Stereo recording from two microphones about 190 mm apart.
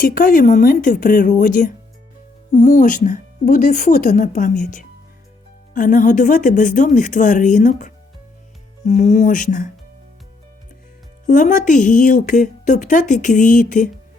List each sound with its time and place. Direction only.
0.0 s a woman's voice: 45° left (ahead or behind)
11.3 s a woman's voice: 40° left (ahead or behind)